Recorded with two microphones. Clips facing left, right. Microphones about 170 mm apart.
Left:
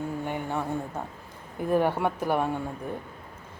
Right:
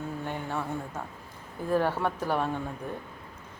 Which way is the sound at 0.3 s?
15° left (ahead or behind).